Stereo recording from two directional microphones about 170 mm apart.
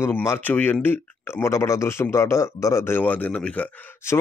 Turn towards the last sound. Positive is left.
turn(degrees=10)  # may be behind; listen again after turning